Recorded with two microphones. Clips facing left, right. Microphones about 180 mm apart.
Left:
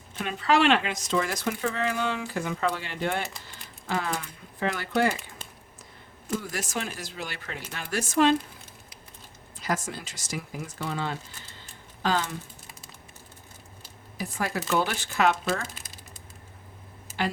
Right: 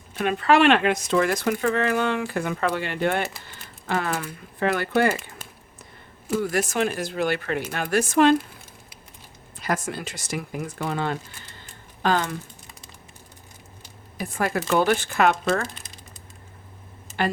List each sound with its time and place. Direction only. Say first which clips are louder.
0.2 s speech: right 5 dB; 60° right (ahead or behind)
6.4 s speech: right 9 dB; 60° right (ahead or behind)
9.6 s speech: right 3 dB; 60° right (ahead or behind)
14.2 s speech: right 5 dB; 55° right (ahead or behind)
17.2 s speech: right 4 dB; 55° right (ahead or behind)